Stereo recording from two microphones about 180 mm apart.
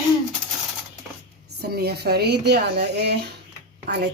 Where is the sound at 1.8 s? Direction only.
60° right (ahead or behind).